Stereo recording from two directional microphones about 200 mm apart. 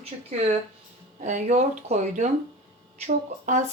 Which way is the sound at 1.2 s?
35° right (ahead or behind).